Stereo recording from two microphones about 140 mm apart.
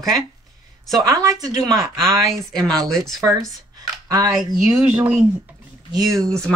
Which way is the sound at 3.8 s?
25° right (ahead or behind).